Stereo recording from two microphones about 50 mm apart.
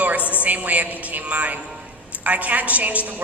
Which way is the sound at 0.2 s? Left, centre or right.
Left.